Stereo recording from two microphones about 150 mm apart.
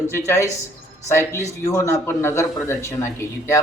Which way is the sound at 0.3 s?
20° left (ahead or behind).